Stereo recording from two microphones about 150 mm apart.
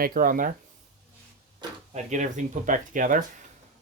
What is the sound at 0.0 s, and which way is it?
Speech, 70° right (ahead or behind).